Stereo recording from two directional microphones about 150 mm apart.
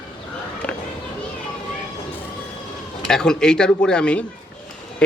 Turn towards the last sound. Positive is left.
turn(degrees=5)  # may be behind; listen again after turning